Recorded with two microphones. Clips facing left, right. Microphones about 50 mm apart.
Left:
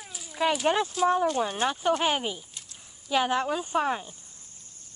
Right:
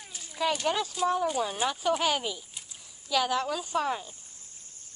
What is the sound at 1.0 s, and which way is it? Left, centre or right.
Speech, centre.